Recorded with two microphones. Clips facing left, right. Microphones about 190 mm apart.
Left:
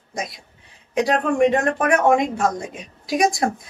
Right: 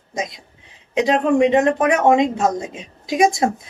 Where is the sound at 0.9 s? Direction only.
20° right (ahead or behind).